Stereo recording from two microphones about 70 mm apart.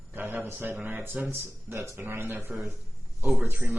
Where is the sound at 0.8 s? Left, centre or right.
Right.